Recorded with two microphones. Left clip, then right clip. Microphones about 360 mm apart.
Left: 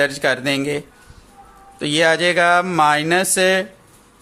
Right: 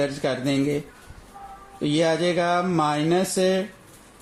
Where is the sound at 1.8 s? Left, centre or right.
Left.